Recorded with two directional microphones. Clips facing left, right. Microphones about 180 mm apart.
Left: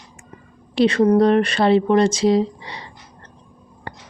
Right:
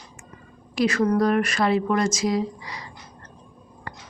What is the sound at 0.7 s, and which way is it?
Speech, 30° left (ahead or behind).